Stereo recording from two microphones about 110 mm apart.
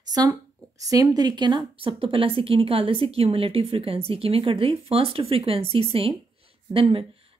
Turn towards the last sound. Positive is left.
turn(degrees=-55)  # may be behind; listen again after turning